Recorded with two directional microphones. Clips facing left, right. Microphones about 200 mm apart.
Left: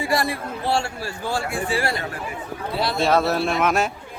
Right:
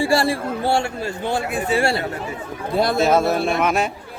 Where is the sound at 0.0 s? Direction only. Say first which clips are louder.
Right 5 dB; 30° right (ahead or behind).